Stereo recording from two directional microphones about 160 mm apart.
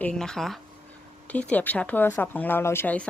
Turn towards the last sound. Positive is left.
turn(degrees=10)  # may be behind; listen again after turning